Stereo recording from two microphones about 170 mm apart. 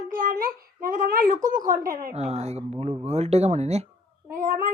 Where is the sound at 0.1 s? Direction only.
60° right (ahead or behind).